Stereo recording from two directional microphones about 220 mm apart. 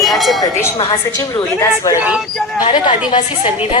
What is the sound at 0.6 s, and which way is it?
A woman's voice, 20° left (ahead or behind).